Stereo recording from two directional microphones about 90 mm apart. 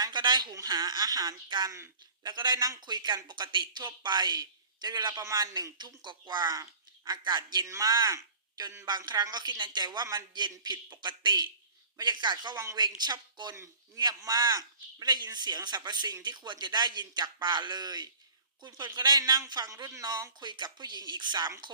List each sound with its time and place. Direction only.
0.0 s a sound: 55° right (ahead or behind)
0.5 s a man's voice: 45° right (ahead or behind)
2.2 s speech: 55° right (ahead or behind)
5.2 s a man's voice: 35° right (ahead or behind)
5.7 s speech: 55° right (ahead or behind)
6.6 s a sound: 40° right (ahead or behind)
7.3 s speech: 50° right (ahead or behind)
7.7 s speech: 40° right (ahead or behind)
9.3 s speech: 55° right (ahead or behind)